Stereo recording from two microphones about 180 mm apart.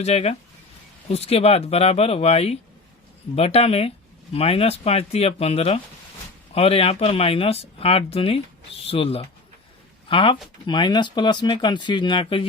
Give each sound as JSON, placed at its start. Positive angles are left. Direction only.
{"t": 0.0, "sound": "speech", "side_deg": 35}